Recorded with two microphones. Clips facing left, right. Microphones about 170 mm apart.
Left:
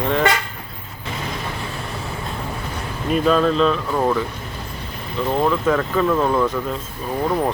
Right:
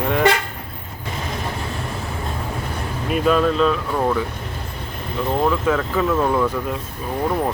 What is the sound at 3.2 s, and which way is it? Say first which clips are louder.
Speech: even; 5° right (ahead or behind).